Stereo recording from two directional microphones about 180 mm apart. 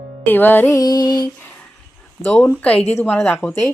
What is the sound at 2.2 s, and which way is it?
Speech, 10° left (ahead or behind).